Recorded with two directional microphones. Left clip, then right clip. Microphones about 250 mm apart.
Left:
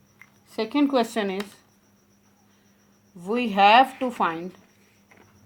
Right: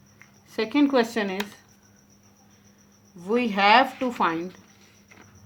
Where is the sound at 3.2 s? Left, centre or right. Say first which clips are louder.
Left 2 dB; centre.